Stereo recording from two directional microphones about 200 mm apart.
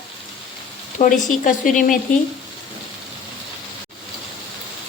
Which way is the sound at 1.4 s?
45° left (ahead or behind).